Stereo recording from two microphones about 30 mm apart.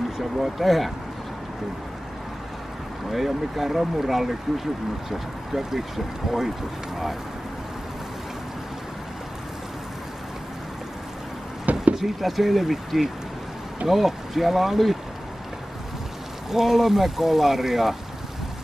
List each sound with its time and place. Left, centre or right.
0.2 s speech: centre
3.1 s speech: centre
11.9 s speech: centre
16.4 s speech: centre